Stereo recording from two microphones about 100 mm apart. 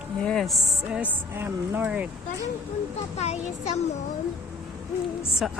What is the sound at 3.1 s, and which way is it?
Speech, 90° left.